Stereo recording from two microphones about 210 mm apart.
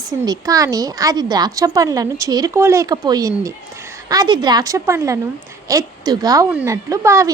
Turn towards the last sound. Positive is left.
turn(degrees=-15)  # may be behind; listen again after turning